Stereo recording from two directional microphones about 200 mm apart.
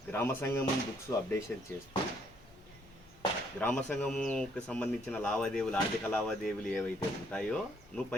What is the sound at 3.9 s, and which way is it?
Speech, 5° left (ahead or behind).